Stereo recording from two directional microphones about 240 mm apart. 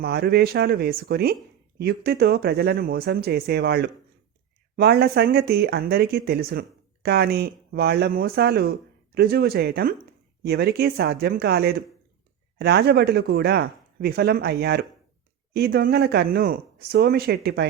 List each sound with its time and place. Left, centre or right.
0.0 s speech: right